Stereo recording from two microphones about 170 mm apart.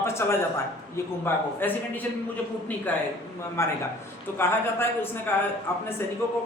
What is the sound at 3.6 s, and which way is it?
A man's voice, 15° left (ahead or behind).